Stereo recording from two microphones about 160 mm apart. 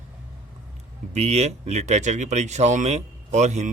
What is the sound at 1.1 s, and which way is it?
Speech, 45° right (ahead or behind).